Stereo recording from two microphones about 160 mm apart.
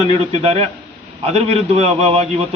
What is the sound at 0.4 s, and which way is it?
A man's voice, 40° right (ahead or behind).